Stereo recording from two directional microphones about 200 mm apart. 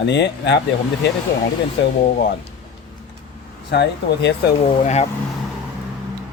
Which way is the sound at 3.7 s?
60° left (ahead or behind).